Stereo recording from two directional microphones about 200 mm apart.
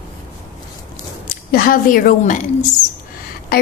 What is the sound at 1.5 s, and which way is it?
Speech, 45° left (ahead or behind).